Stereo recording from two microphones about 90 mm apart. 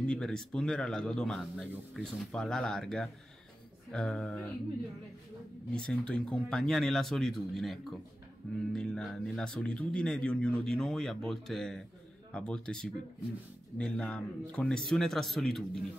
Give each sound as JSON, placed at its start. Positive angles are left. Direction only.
{"t": 0.0, "sound": "speech", "side_deg": 10}
{"t": 5.7, "sound": "speech", "side_deg": 10}